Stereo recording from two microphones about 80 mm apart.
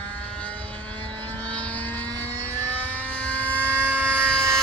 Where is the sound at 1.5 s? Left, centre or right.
Centre.